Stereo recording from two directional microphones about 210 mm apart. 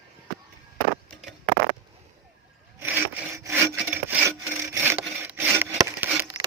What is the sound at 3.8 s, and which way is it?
Sawing, 10° right (ahead or behind).